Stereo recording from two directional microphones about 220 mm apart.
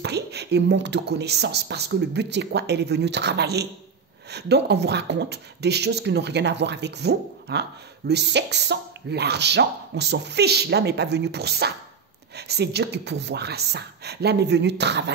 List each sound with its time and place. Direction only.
0.0 s speech: 50° right (ahead or behind)